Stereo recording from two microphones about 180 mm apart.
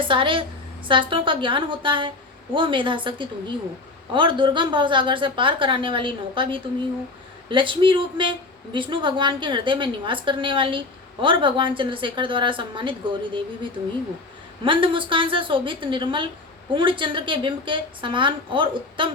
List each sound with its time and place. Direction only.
0.0 s a woman's voice: 30° right (ahead or behind)
14.6 s a woman's voice: 30° right (ahead or behind)